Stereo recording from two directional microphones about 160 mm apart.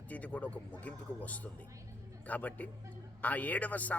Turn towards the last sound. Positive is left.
turn(degrees=10)  # may be behind; listen again after turning